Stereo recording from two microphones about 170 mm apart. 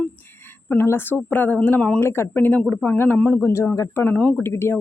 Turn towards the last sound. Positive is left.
turn(degrees=15)  # may be behind; listen again after turning